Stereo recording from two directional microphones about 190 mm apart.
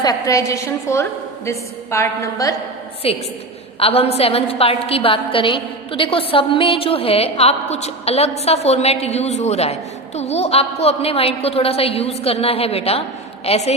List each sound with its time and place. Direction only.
0.0 s a woman's voice: 20° left (ahead or behind)
3.0 s a woman's voice: 30° left (ahead or behind)